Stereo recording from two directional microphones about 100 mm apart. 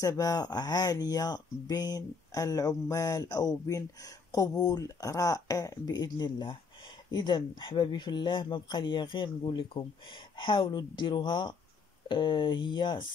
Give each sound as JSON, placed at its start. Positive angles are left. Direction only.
{"t": 0.0, "sound": "speech", "side_deg": 40}